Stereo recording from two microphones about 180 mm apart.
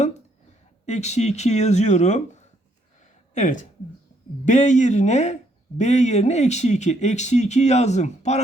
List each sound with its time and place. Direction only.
0.9 s speech: 40° left (ahead or behind)